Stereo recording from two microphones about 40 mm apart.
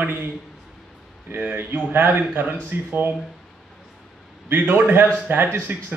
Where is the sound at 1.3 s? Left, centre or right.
Right.